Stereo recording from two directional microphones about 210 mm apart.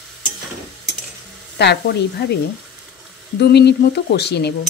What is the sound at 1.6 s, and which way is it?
Speech, 55° left (ahead or behind).